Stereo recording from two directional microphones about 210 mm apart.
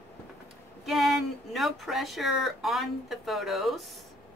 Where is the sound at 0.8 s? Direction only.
Centre (ahead or behind).